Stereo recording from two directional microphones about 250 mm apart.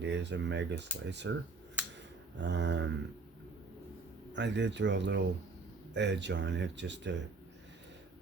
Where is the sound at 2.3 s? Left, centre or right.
Right.